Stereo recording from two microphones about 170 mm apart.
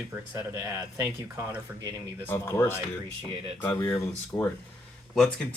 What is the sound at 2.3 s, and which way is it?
Speech, 15° left (ahead or behind).